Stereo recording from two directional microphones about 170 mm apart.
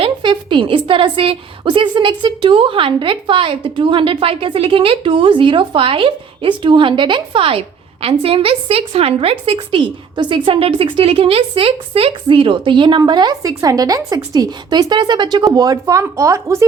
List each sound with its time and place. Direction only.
0.0 s a woman's voice: 30° right (ahead or behind)